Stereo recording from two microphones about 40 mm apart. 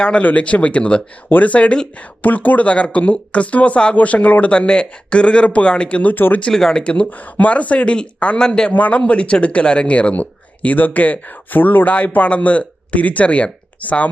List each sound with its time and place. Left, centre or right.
0.2 s speech: left
1.3 s speech: left
2.2 s a man's voice: left
6.0 s speech: left
6.5 s speech: centre
6.7 s speech: left
8.4 s a man's voice: centre
8.7 s speech: left
11.9 s speech: left